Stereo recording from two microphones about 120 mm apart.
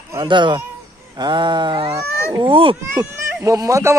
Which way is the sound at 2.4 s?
50° right (ahead or behind).